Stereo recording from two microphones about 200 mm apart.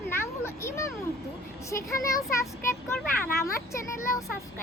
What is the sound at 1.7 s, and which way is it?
Speech, 15° left (ahead or behind).